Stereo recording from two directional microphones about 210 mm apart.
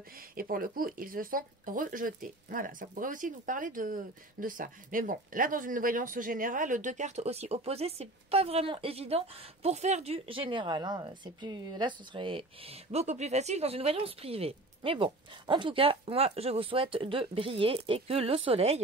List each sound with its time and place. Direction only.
0.4 s a woman's voice: 45° right (ahead or behind); by 18.8 s 30° right (ahead or behind)